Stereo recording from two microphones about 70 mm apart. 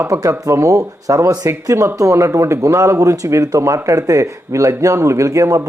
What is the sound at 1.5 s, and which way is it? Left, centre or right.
A man's voice, right.